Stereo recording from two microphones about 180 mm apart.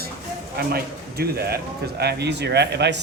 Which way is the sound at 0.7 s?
60° right (ahead or behind).